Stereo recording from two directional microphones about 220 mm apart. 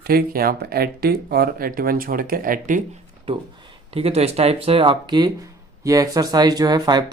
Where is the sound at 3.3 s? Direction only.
25° right (ahead or behind).